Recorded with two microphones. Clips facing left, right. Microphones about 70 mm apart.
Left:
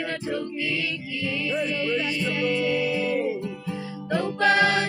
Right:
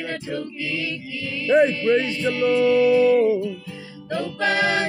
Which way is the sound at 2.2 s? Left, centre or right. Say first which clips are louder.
Right 8 dB; centre.